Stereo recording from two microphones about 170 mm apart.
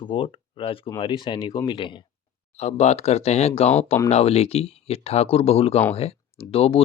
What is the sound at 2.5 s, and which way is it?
Speech, 40° left (ahead or behind).